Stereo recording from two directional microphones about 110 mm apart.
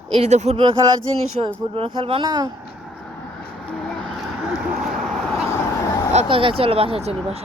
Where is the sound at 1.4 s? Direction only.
55° right (ahead or behind).